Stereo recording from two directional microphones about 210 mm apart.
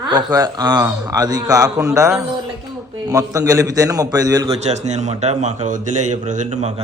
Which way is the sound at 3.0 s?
15° right (ahead or behind).